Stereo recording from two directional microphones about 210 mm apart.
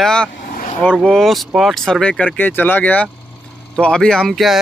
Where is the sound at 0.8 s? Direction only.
5° left (ahead or behind).